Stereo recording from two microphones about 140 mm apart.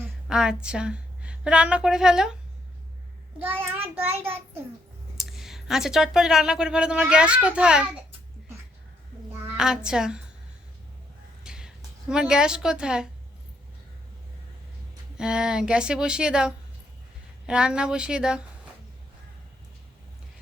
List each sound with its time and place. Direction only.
0.0 s a woman's voice: 5° right (ahead or behind)
3.3 s speech: 15° right (ahead or behind)
5.1 s speech: 5° right (ahead or behind)
9.6 s a child's voice: 5° right (ahead or behind)
11.4 s speech: 5° right (ahead or behind)
15.2 s speech: 5° right (ahead or behind)